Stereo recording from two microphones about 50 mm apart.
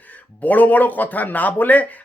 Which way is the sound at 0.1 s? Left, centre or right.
Left.